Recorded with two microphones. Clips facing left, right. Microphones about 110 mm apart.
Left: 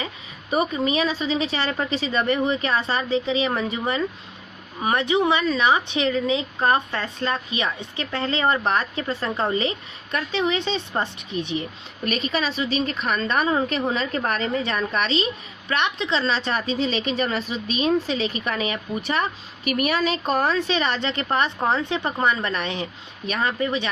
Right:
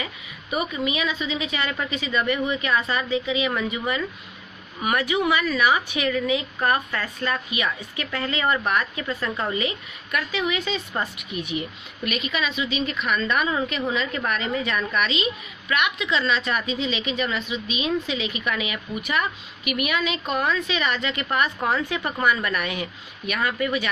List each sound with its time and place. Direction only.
0.0 s speech: 35° left (ahead or behind)